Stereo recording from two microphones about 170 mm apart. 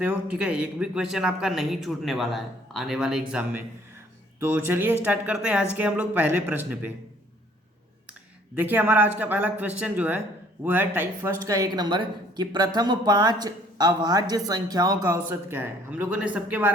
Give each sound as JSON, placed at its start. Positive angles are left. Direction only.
{"t": 0.0, "sound": "speech", "side_deg": -10}
{"t": 8.5, "sound": "speech", "side_deg": -10}